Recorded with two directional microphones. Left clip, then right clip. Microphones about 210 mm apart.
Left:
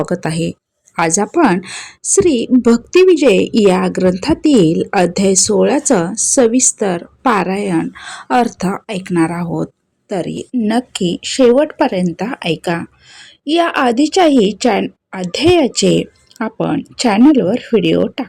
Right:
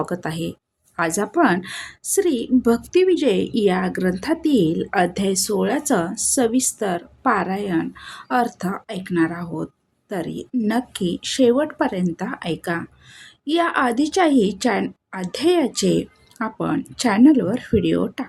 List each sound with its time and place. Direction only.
0.0 s a woman's voice: 25° left (ahead or behind)